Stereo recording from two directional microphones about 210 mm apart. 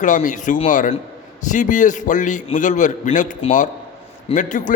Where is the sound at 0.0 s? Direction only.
40° left (ahead or behind).